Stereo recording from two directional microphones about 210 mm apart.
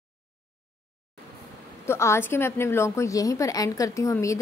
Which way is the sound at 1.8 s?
10° left (ahead or behind).